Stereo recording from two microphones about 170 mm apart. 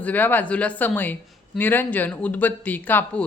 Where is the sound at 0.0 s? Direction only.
10° left (ahead or behind).